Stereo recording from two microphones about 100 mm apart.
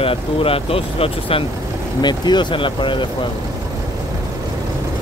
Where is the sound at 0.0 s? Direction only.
70° left (ahead or behind).